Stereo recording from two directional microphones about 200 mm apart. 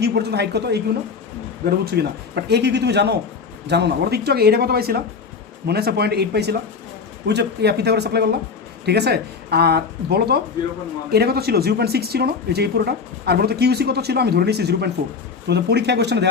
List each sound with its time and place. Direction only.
0.0 s speech: 55° right (ahead or behind)
1.8 s speech: 55° right (ahead or behind)